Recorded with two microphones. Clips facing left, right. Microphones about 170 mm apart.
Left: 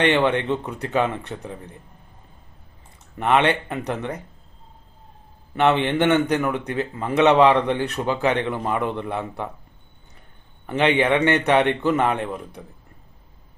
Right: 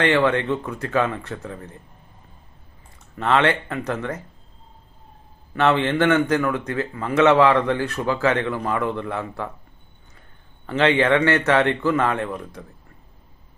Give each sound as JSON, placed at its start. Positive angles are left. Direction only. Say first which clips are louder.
{"t": 0.0, "sound": "speech", "louder": "even", "side_deg": 20}
{"t": 3.2, "sound": "speech", "louder": "even", "side_deg": 20}
{"t": 5.5, "sound": "speech", "louder": "even", "side_deg": 20}
{"t": 10.7, "sound": "speech", "louder": "right 1 dB", "side_deg": 20}